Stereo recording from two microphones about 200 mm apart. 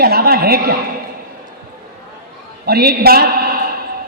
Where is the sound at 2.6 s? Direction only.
50° right (ahead or behind).